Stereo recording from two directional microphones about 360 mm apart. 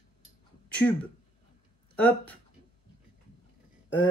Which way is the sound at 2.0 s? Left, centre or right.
Centre.